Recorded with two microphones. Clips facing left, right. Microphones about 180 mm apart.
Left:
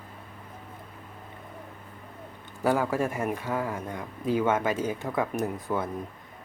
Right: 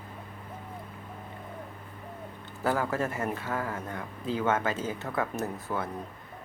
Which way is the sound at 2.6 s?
15° left (ahead or behind).